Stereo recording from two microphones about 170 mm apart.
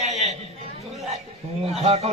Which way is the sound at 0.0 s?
40° right (ahead or behind).